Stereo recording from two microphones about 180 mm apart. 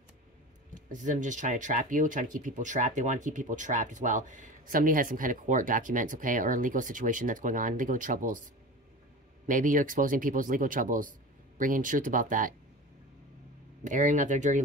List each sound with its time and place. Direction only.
0.7 s speech: 45° right (ahead or behind)
9.5 s speech: 45° right (ahead or behind)
13.8 s speech: 45° right (ahead or behind)